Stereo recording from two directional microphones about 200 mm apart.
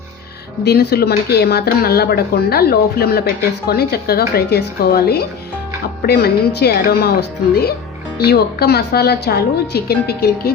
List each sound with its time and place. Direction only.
0.6 s speech: 55° left (ahead or behind)